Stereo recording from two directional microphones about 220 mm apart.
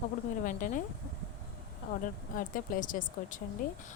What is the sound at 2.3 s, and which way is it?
A woman's voice, 40° left (ahead or behind).